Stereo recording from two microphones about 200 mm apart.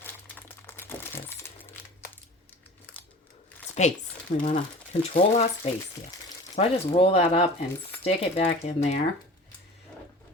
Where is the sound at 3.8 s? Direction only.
35° left (ahead or behind).